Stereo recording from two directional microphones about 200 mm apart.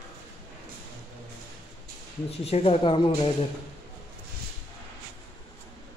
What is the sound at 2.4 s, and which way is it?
Speech, 30° left (ahead or behind).